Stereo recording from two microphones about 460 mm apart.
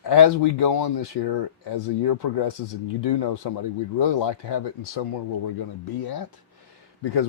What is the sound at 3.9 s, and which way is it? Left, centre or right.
Speech, left.